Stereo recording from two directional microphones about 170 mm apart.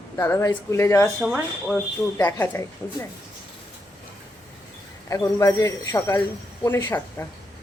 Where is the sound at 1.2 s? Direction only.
Centre (ahead or behind).